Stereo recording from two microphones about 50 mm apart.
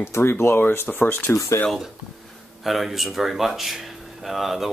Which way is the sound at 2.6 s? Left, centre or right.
Centre.